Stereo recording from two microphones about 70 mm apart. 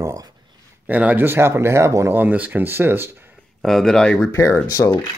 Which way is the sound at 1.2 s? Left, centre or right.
Right.